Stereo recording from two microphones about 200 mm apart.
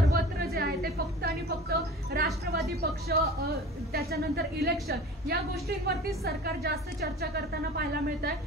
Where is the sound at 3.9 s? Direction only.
50° right (ahead or behind).